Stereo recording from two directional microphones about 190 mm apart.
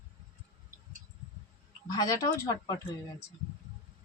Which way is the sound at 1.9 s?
20° left (ahead or behind).